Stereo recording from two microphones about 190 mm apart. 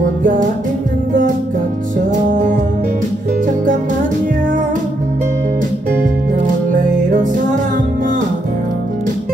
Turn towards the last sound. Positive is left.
turn(degrees=-45)  # may be behind; listen again after turning